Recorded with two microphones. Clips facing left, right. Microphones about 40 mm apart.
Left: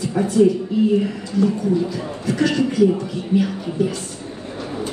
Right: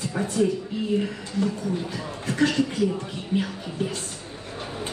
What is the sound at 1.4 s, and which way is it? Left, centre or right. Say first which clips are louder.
Speech: left 8 dB; left.